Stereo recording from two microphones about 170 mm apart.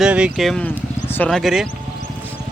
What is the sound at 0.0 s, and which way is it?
Speech, 5° right (ahead or behind).